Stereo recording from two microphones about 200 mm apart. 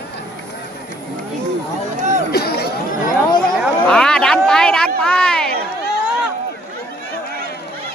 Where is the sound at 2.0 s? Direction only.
35° right (ahead or behind).